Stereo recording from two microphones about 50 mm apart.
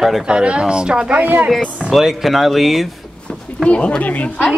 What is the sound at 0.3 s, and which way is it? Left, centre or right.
Speech, centre.